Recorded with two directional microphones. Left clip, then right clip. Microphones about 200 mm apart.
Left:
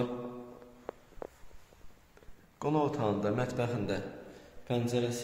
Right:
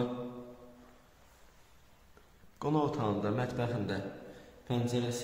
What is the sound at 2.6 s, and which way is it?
A man's voice, 10° left (ahead or behind).